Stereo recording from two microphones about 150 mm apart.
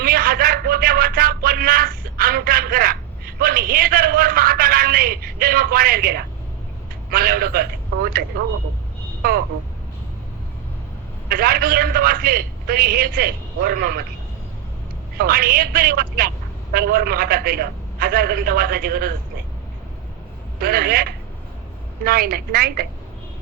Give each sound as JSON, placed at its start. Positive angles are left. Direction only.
{"t": 0.0, "sound": "a sound", "side_deg": -75}
{"t": 3.4, "sound": "a man's voice", "side_deg": -75}
{"t": 7.1, "sound": "a man's voice", "side_deg": -80}
{"t": 9.2, "sound": "speech", "side_deg": -75}
{"t": 11.3, "sound": "a man's voice", "side_deg": -80}
{"t": 15.2, "sound": "a man's voice", "side_deg": -80}
{"t": 20.6, "sound": "a man's voice", "side_deg": -80}